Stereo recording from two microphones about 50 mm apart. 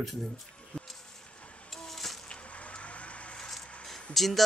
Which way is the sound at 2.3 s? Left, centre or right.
Left.